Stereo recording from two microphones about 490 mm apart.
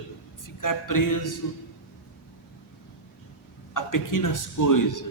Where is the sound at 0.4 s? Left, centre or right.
Left.